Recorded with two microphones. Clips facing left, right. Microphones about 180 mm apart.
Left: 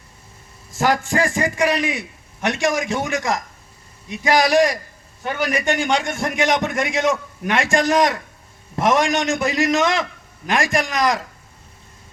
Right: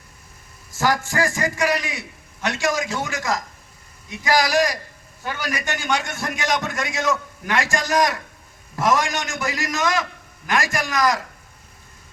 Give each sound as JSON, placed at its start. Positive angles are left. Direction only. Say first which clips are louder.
{"t": 0.8, "sound": "a man's voice", "louder": "left 2 dB", "side_deg": 20}